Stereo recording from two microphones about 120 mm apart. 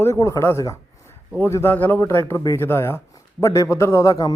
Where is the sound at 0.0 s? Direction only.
25° left (ahead or behind).